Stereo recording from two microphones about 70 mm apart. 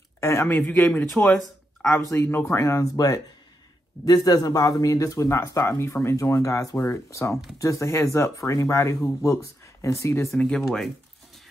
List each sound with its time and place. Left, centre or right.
0.2 s speech: left
0.5 s speech: left
2.1 s speech: left
5.7 s speech: left
10.3 s speech: centre